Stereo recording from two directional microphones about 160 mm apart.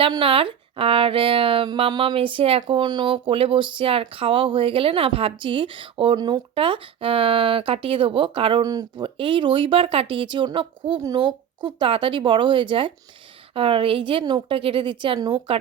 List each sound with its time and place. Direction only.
0.0 s speech: 35° right (ahead or behind)